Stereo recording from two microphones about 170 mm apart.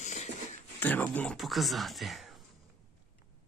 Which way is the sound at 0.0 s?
45° left (ahead or behind).